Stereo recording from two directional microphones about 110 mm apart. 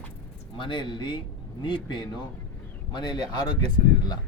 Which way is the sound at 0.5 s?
45° left (ahead or behind).